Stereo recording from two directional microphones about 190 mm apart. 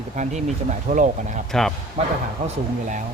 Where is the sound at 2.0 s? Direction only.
30° right (ahead or behind).